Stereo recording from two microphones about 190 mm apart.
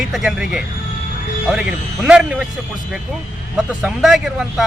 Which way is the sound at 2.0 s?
5° right (ahead or behind).